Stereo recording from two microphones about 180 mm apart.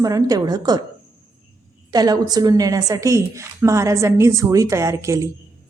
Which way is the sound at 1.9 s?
20° right (ahead or behind).